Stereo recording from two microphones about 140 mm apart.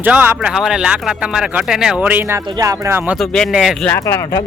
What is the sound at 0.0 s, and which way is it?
Speech, 10° right (ahead or behind).